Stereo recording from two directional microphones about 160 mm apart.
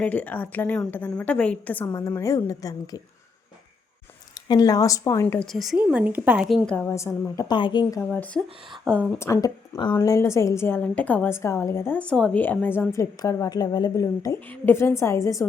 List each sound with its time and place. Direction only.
0.0 s a woman's voice: 10° left (ahead or behind)
1.9 s a woman's voice: 20° left (ahead or behind)
4.4 s a woman's voice: 25° left (ahead or behind)
5.5 s a woman's voice: centre (ahead or behind)
6.7 s a woman's voice: 15° left (ahead or behind)
8.1 s a woman's voice: 10° left (ahead or behind)